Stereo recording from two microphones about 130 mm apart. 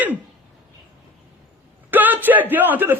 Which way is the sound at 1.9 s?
15° right (ahead or behind).